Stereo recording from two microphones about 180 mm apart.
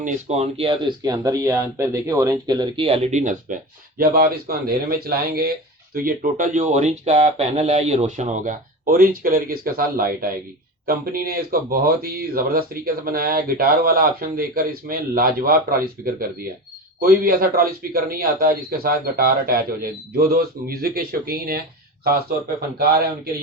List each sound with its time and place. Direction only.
0.0 s a man's voice: 35° right (ahead or behind); by 21.6 s 55° right (ahead or behind)